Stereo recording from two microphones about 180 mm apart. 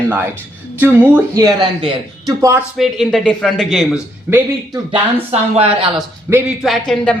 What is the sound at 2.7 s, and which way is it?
A man's voice, centre (ahead or behind).